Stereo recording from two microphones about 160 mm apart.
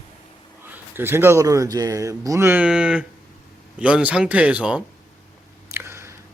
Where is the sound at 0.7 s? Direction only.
15° right (ahead or behind).